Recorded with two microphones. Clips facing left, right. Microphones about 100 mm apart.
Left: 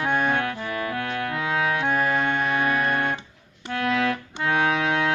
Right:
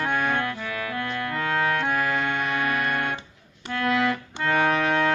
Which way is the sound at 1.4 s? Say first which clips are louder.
Even; 10° left (ahead or behind).